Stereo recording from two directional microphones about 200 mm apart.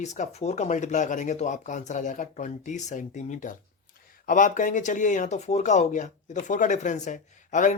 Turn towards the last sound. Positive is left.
turn(degrees=40)  # may be behind; listen again after turning